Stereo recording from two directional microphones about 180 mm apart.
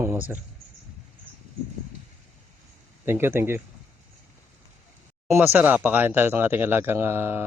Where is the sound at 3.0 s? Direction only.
15° right (ahead or behind).